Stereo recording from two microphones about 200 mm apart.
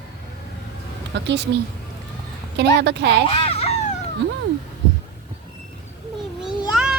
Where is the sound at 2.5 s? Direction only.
55° right (ahead or behind).